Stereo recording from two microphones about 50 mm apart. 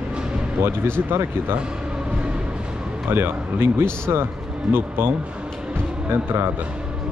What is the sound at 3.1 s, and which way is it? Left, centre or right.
Speech, right.